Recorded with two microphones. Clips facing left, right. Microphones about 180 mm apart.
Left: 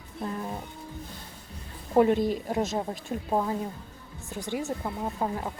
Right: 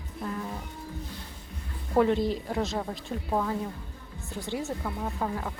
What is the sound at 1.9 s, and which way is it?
Speech, 15° left (ahead or behind).